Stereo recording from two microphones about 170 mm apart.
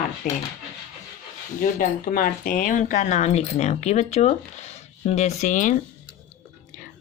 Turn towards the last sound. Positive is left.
turn(degrees=45)  # may be behind; listen again after turning